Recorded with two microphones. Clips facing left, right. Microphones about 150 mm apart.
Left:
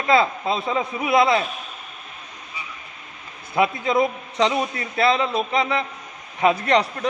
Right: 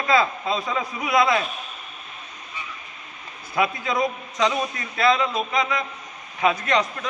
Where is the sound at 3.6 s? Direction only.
25° left (ahead or behind).